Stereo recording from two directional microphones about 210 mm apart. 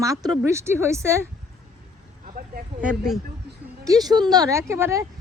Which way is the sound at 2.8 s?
Centre (ahead or behind).